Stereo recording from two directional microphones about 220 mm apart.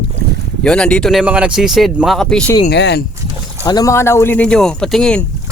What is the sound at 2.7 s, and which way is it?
Speech, 50° left (ahead or behind).